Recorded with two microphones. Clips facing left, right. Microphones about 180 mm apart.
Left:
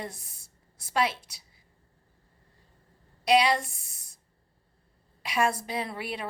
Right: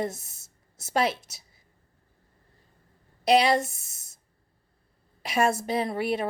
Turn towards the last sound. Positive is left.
turn(degrees=-45)  # may be behind; listen again after turning